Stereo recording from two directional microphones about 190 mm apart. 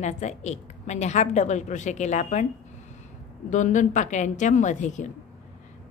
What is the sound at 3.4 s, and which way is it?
A woman's voice, 40° left (ahead or behind).